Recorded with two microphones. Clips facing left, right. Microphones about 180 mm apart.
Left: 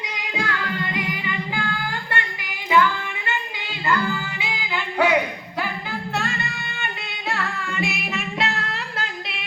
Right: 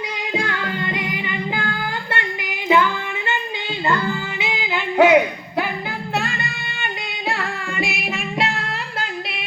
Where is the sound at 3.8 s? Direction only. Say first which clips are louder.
Right 1 dB; 25° right (ahead or behind).